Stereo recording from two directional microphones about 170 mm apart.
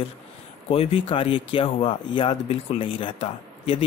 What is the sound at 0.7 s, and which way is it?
Speech, 35° left (ahead or behind).